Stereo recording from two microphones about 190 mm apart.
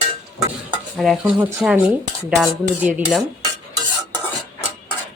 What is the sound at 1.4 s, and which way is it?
Dishes, 15° right (ahead or behind).